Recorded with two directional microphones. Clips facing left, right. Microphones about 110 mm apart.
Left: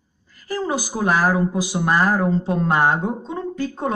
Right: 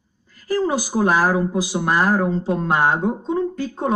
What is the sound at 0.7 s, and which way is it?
A woman's voice, 25° right (ahead or behind).